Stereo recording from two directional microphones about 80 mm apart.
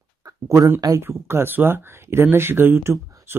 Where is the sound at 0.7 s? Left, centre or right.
Right.